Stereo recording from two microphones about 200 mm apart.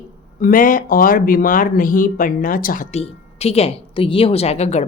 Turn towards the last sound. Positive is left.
turn(degrees=35)  # may be behind; listen again after turning